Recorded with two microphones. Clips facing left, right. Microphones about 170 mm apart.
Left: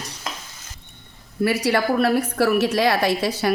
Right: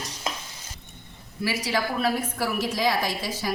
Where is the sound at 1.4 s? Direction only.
65° left (ahead or behind).